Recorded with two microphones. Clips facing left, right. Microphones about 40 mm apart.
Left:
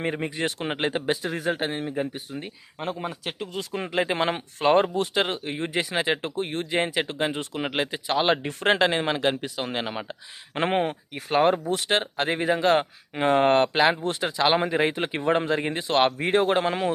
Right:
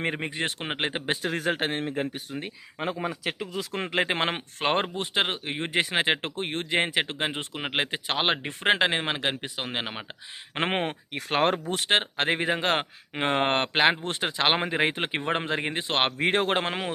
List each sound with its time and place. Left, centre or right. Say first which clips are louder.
0.0 s speech: left 2 dB; right
1.1 s speech: even; right
3.8 s speech: left 2 dB; right
8.3 s speech: left 1 dB; right
11.1 s speech: left 3 dB; right